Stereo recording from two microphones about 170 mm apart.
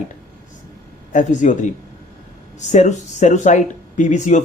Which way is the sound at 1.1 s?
45° left (ahead or behind).